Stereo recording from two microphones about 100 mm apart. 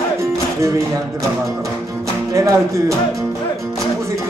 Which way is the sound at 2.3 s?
30° right (ahead or behind).